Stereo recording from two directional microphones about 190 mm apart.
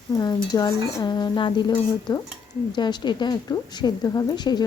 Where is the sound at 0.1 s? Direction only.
20° left (ahead or behind).